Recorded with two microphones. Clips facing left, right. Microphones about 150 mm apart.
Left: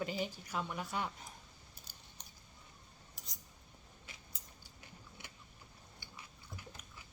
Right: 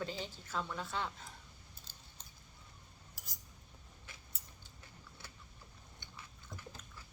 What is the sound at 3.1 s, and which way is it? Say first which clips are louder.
Cutlery: left 1 dB; 5° right (ahead or behind).